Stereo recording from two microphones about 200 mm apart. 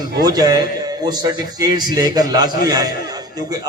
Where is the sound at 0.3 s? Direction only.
20° right (ahead or behind).